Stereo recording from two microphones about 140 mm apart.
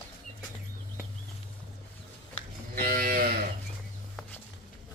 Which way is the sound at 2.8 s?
90° right.